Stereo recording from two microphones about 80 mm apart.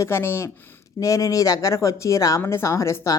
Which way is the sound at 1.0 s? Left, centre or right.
Left.